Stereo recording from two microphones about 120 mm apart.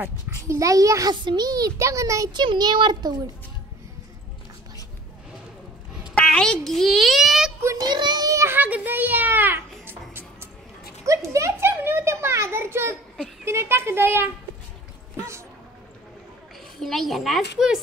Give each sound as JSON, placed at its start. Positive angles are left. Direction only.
{"t": 0.0, "sound": "a child's voice", "side_deg": -25}
{"t": 6.1, "sound": "a child's voice", "side_deg": 10}
{"t": 7.8, "sound": "a sound", "side_deg": -35}
{"t": 11.1, "sound": "a child's voice", "side_deg": -25}
{"t": 16.8, "sound": "a child's voice", "side_deg": 0}